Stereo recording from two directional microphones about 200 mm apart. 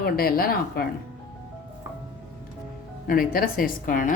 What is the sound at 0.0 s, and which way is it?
Speech, 50° left (ahead or behind).